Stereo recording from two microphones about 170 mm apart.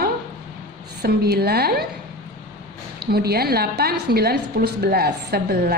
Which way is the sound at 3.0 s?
65° right (ahead or behind).